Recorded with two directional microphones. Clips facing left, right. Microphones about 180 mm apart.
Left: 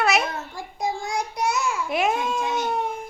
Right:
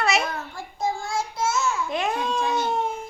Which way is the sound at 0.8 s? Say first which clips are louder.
Even; 15° left (ahead or behind).